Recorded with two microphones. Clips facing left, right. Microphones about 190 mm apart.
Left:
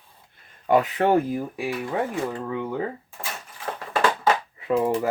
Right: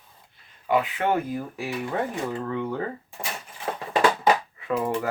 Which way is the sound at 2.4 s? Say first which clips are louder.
Even; 5° left (ahead or behind).